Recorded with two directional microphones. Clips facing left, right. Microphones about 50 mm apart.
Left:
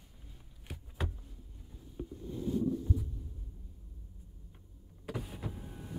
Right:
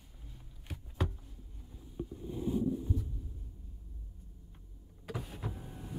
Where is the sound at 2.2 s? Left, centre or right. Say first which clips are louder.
Even; centre.